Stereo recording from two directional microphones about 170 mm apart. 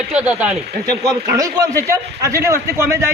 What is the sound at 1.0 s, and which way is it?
A man's voice, 20° right (ahead or behind).